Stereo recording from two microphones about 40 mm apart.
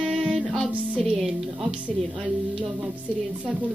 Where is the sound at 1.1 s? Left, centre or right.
Centre.